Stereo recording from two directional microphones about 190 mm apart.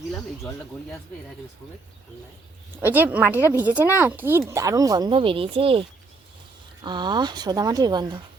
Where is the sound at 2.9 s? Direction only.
10° right (ahead or behind).